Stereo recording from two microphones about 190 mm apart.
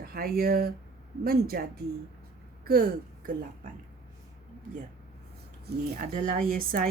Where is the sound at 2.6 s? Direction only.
50° right (ahead or behind).